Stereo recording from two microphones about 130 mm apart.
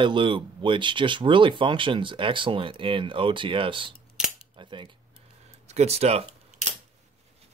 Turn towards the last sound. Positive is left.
turn(degrees=-60)  # may be behind; listen again after turning